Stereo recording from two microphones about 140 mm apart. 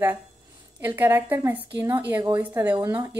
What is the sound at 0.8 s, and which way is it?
Speech, 15° right (ahead or behind).